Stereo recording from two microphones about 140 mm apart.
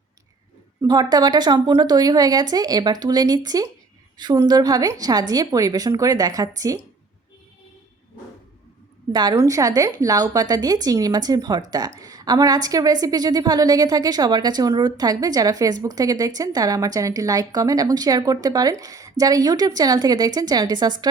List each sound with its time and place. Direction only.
0.8 s a woman's voice: 25° right (ahead or behind)
9.1 s a woman's voice: 25° right (ahead or behind)